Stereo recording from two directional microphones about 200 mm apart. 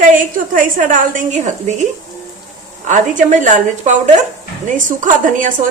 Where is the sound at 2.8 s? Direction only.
35° right (ahead or behind).